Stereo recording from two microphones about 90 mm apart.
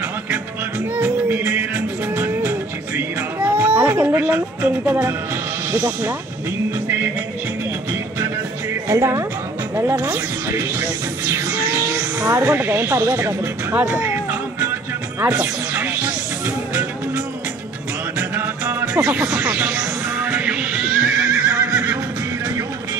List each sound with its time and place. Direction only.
0.9 s music: 25° right (ahead or behind)
3.3 s cat: 20° right (ahead or behind)
5.7 s speech: 25° right (ahead or behind)
8.8 s speech: 35° right (ahead or behind)
11.9 s music: 10° right (ahead or behind)
12.3 s speech: 30° right (ahead or behind)
13.7 s music: 15° right (ahead or behind)
18.3 s music: 25° right (ahead or behind)
19.0 s music: 15° right (ahead or behind)
21.5 s neigh: 25° right (ahead or behind)